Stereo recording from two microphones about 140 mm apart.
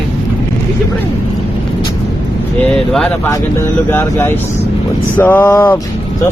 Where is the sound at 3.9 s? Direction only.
15° left (ahead or behind).